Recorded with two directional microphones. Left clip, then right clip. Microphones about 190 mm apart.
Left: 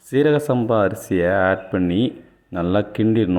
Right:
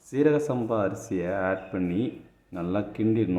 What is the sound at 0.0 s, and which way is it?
Speech, 30° left (ahead or behind).